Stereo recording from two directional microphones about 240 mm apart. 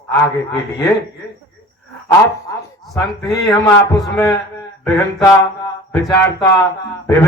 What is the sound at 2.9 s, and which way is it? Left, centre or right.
A man's voice, centre.